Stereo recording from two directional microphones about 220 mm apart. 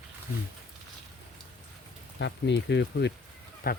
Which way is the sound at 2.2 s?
50° left (ahead or behind).